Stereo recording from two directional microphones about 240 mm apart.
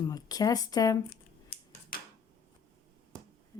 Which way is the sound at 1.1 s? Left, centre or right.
Left.